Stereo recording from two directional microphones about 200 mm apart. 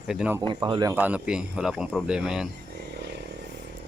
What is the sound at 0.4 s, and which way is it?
Speech, 20° right (ahead or behind).